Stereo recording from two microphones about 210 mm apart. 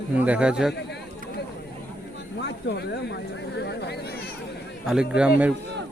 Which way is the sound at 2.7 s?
55° left (ahead or behind).